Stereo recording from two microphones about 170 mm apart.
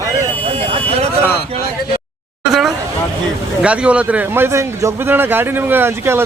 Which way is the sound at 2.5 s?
Centre (ahead or behind).